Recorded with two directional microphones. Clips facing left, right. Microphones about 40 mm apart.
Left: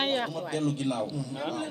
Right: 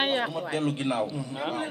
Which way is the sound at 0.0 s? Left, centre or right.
Centre.